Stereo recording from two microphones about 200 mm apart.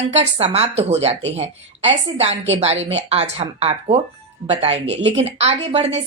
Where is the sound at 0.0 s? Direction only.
35° right (ahead or behind).